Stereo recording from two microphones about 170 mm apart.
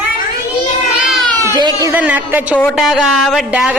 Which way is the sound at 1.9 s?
10° right (ahead or behind).